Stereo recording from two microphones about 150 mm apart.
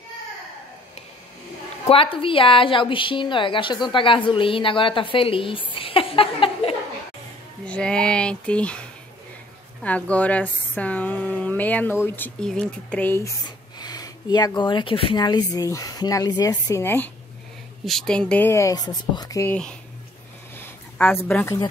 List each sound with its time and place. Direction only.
1.9 s a woman's voice: 35° left (ahead or behind)
5.8 s a sound: 35° left (ahead or behind)
7.6 s speech: 5° left (ahead or behind)
13.7 s speech: 25° left (ahead or behind)
17.8 s speech: 5° left (ahead or behind); by 19.5 s 25° left (ahead or behind)
20.5 s a sound: 15° left (ahead or behind)